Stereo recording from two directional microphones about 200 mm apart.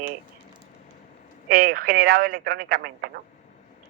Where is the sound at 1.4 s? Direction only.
50° right (ahead or behind).